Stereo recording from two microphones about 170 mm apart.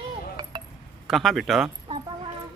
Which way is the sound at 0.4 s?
25° right (ahead or behind).